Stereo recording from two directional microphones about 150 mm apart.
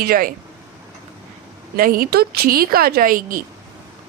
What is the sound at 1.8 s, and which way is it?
Speech, 75° right (ahead or behind).